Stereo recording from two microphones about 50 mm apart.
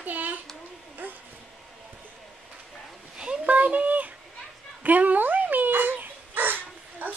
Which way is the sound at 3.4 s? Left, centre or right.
Right.